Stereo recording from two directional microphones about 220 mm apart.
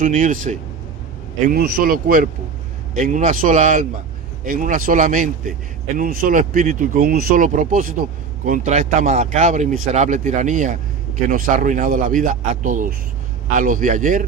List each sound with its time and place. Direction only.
0.0 s speech: 35° right (ahead or behind)